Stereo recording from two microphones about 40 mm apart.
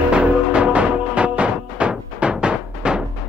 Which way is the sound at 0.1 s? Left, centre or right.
Right.